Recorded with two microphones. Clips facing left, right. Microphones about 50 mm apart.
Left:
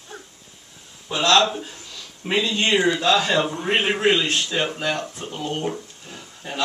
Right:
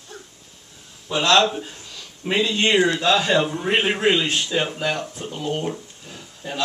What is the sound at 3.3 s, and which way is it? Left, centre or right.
Speech, centre.